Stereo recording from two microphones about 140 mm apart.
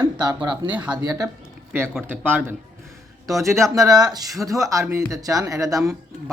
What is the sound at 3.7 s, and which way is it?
A man's voice, 25° right (ahead or behind).